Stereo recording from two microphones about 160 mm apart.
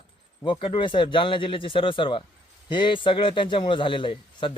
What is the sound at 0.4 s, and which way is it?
A man's voice, 30° left (ahead or behind).